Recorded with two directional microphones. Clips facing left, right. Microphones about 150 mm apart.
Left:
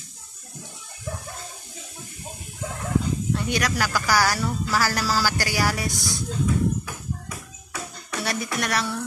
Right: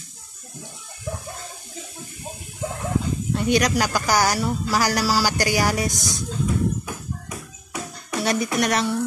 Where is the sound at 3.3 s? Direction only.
20° right (ahead or behind).